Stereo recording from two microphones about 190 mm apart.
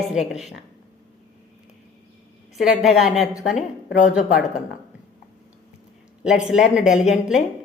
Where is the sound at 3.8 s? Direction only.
40° left (ahead or behind).